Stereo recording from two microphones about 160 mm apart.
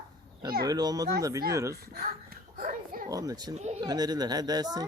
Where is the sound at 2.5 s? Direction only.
60° right (ahead or behind).